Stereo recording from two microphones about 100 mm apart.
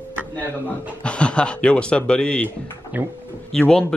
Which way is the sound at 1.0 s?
10° left (ahead or behind).